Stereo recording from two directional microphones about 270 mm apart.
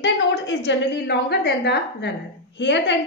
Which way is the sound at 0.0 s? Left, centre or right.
Left.